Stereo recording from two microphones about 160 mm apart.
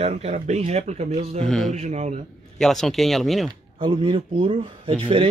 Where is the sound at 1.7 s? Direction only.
45° right (ahead or behind).